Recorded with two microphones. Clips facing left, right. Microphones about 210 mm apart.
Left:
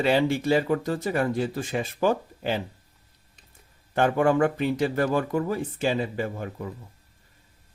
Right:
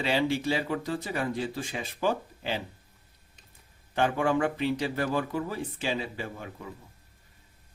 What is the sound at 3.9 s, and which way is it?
Speech, 45° left (ahead or behind).